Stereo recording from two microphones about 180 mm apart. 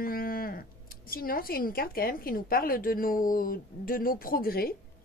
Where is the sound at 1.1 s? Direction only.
55° left (ahead or behind).